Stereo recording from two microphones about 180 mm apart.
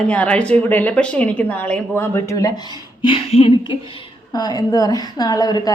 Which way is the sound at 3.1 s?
30° left (ahead or behind).